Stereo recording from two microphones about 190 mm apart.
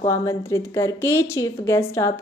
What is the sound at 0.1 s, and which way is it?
A woman's voice, 15° left (ahead or behind).